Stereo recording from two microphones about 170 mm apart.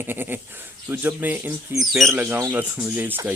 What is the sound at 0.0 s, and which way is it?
Speech, 10° right (ahead or behind).